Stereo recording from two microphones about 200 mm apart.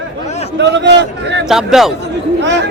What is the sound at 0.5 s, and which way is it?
Speech, 60° right (ahead or behind).